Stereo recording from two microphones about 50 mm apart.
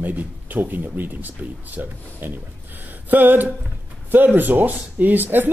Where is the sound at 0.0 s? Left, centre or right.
Right.